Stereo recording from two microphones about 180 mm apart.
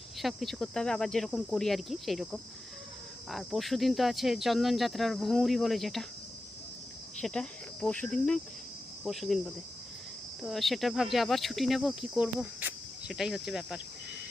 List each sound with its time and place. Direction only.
0.2 s speech: centre (ahead or behind)
7.2 s cricket: 5° left (ahead or behind)
9.0 s speech: centre (ahead or behind)
10.4 s speech: centre (ahead or behind)